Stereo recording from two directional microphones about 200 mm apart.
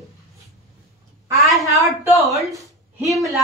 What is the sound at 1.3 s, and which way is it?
Speech, centre (ahead or behind).